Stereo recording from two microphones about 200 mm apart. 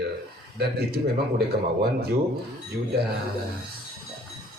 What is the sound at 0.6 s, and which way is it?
Speech, 55° right (ahead or behind).